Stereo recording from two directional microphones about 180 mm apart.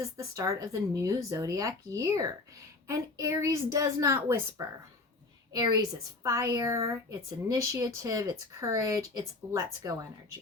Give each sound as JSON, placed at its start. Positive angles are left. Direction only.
{"t": 0.2, "sound": "a woman's voice", "side_deg": -20}